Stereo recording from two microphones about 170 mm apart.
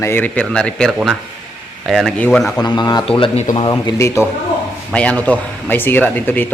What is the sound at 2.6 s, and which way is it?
Speech, 25° left (ahead or behind).